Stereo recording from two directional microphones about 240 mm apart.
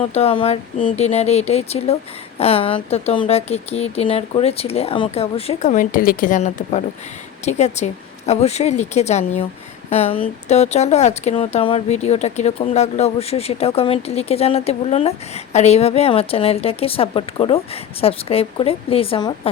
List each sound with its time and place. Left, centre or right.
0.0 s speech: left